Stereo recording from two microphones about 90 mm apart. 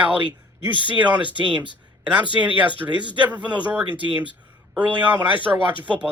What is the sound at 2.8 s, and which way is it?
Speech, 25° right (ahead or behind).